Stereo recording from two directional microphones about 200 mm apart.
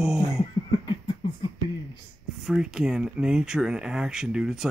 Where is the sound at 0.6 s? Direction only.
20° left (ahead or behind).